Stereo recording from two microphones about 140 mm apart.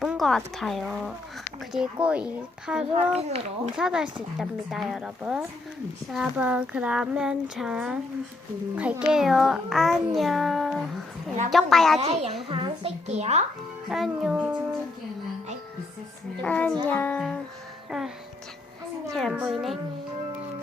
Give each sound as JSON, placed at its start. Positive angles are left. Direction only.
{"t": 0.0, "sound": "a woman's voice", "side_deg": 0}
{"t": 2.9, "sound": "a child's voice", "side_deg": -45}
{"t": 3.8, "sound": "speech", "side_deg": -5}
{"t": 11.9, "sound": "a child's voice", "side_deg": -50}
{"t": 12.5, "sound": "a child's voice", "side_deg": -40}
{"t": 13.1, "sound": "a child's voice", "side_deg": -50}
{"t": 13.9, "sound": "speech", "side_deg": 0}
{"t": 16.4, "sound": "music", "side_deg": 10}
{"t": 19.1, "sound": "a child's voice", "side_deg": 0}